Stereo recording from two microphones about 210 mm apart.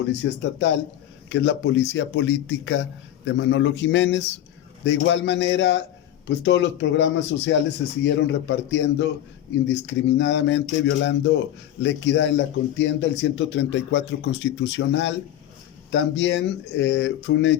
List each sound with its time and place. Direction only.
0.2 s speech: 70° left (ahead or behind)
1.3 s speech: 60° left (ahead or behind)